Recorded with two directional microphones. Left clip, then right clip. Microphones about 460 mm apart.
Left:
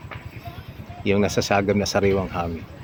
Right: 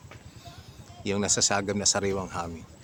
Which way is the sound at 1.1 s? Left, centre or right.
Right.